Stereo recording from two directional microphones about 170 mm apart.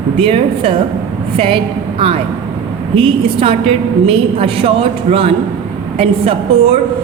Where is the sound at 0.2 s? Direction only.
30° right (ahead or behind).